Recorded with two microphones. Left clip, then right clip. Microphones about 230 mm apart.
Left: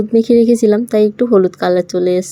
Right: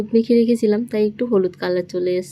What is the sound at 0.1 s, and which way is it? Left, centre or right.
Speech, centre.